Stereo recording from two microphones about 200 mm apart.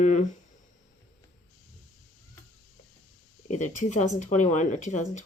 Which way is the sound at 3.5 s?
35° left (ahead or behind).